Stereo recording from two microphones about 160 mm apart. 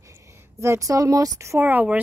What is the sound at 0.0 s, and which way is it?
A woman's voice, 20° right (ahead or behind).